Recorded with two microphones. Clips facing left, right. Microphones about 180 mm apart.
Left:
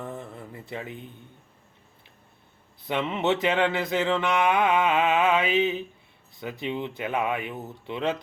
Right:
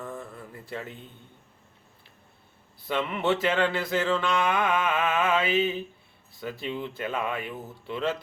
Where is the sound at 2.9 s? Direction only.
20° left (ahead or behind).